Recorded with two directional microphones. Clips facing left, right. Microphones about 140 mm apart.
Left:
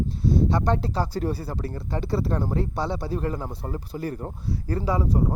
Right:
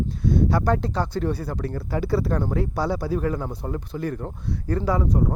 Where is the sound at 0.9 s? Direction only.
35° left (ahead or behind).